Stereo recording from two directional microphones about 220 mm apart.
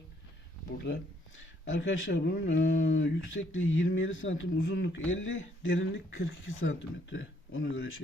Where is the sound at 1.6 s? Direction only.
60° left (ahead or behind).